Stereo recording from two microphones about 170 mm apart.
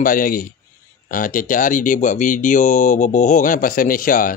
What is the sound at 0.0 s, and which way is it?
Speech, 55° left (ahead or behind).